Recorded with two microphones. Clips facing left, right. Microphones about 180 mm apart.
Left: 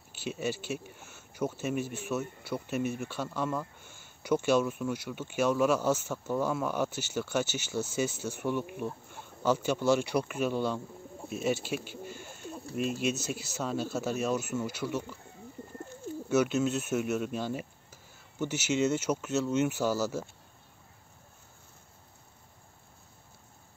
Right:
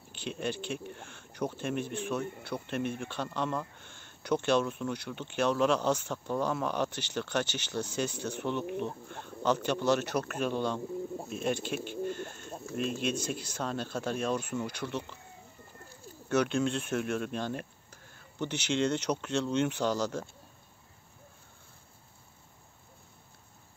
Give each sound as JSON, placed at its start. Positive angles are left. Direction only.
{"t": 0.1, "sound": "speech", "side_deg": 5}
{"t": 16.3, "sound": "speech", "side_deg": 5}